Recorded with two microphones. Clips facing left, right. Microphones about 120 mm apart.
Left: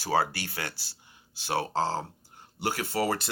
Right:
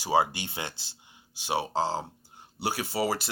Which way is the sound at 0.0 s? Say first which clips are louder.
Right 2 dB; 15° right (ahead or behind).